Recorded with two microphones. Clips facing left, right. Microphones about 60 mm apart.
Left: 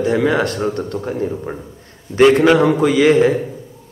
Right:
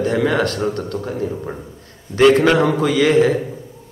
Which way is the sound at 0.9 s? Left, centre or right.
Left.